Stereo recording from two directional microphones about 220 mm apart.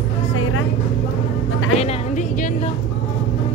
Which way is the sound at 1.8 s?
30° left (ahead or behind).